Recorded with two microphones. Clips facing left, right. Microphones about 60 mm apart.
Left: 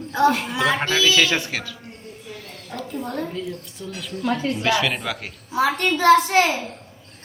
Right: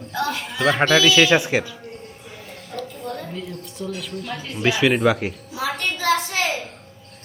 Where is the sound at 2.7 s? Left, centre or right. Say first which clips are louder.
Right 1 dB; left.